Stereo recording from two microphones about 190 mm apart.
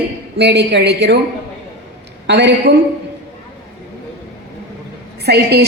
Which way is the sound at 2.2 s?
65° right (ahead or behind).